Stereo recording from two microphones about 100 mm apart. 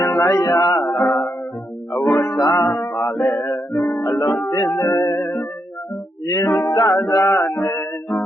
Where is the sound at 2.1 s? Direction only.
40° left (ahead or behind).